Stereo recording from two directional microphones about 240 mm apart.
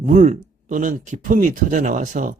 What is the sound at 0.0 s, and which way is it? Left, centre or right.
Speech, right.